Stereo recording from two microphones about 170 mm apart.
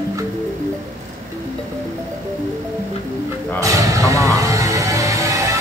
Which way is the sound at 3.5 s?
20° right (ahead or behind).